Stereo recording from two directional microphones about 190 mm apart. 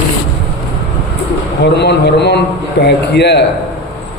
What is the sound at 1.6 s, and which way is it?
Speech, 65° left (ahead or behind).